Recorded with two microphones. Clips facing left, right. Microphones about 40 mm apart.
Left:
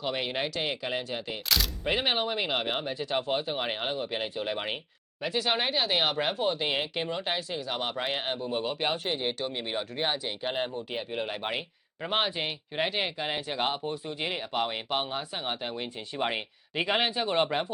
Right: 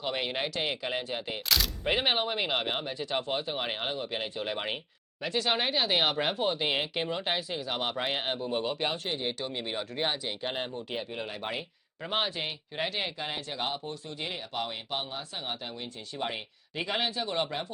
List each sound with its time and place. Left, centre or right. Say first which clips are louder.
0.0 s speech: left 1 dB; centre
11.3 s speech: left 3 dB; left